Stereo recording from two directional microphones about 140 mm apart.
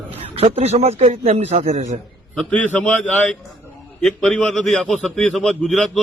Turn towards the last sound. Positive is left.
turn(degrees=5)  # may be behind; listen again after turning